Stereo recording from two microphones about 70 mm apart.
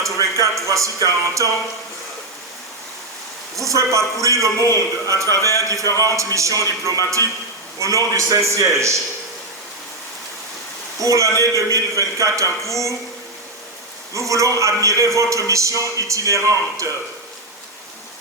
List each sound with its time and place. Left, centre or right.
0.2 s a man's voice: right
3.7 s a man's voice: right
11.0 s a man's voice: right
14.1 s a man's voice: right